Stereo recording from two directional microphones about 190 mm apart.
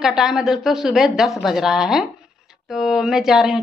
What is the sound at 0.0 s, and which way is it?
A woman's voice, centre (ahead or behind).